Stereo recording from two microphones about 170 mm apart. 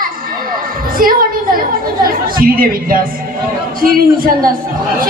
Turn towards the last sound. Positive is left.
turn(degrees=-55)  # may be behind; listen again after turning